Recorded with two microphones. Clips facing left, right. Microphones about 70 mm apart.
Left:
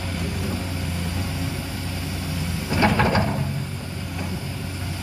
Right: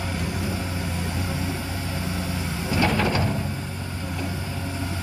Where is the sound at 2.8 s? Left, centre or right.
Left.